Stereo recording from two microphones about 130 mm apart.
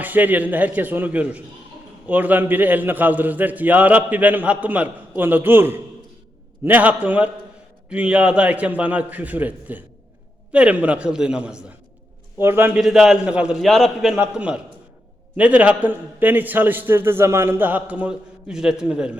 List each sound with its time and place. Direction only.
0.0 s a man's voice: 15° right (ahead or behind)
12.7 s a man's voice: 5° right (ahead or behind)